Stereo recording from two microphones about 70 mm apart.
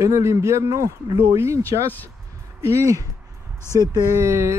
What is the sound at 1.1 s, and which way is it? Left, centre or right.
Speech, right.